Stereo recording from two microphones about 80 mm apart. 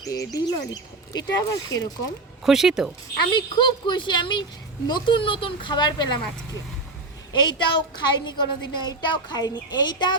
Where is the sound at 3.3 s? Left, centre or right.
Left.